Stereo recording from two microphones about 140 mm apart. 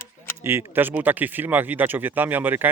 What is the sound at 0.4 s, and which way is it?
Speech, 15° right (ahead or behind).